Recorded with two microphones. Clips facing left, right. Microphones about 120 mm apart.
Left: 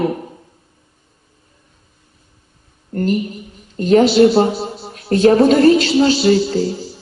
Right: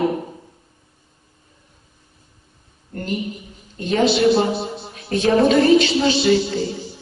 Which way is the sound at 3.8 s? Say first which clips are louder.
Left 7 dB; 35° left (ahead or behind).